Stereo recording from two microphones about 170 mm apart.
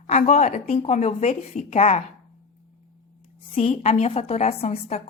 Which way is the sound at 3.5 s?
40° left (ahead or behind).